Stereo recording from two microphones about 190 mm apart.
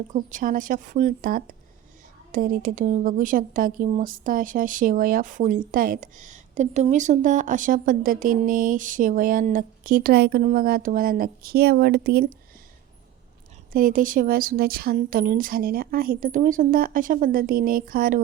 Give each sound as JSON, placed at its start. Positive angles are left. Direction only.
{"t": 0.1, "sound": "speech", "side_deg": -40}
{"t": 13.7, "sound": "speech", "side_deg": -45}